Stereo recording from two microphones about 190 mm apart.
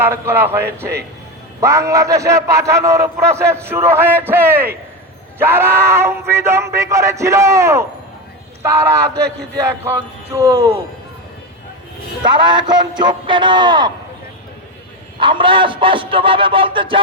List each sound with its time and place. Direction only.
0.0 s a man's voice: 10° right (ahead or behind)
1.6 s a man's voice: 15° right (ahead or behind)
12.2 s music: 25° right (ahead or behind)
15.2 s music: 25° right (ahead or behind)